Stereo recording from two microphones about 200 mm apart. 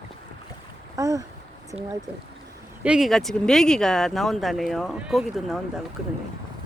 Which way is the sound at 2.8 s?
5° right (ahead or behind).